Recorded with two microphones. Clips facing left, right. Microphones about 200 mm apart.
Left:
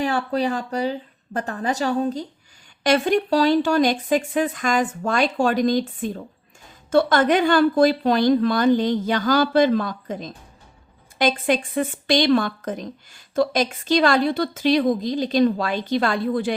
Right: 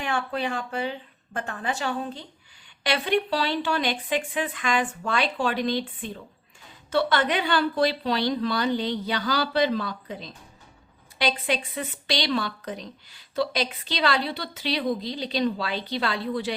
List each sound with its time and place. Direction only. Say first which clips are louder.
0.0 s a woman's voice: left 6 dB; 35° left (ahead or behind)